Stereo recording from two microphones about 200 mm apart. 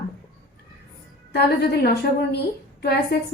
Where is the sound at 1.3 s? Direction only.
55° left (ahead or behind).